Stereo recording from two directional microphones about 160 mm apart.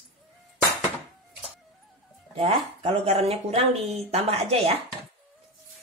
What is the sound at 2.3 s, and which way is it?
Speech, 35° right (ahead or behind).